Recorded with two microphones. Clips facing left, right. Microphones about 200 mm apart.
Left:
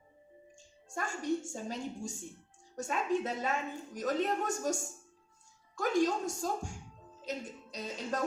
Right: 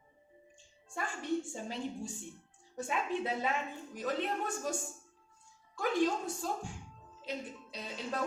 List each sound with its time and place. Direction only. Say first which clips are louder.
0.9 s a woman's voice: left 2 dB; 45° left (ahead or behind)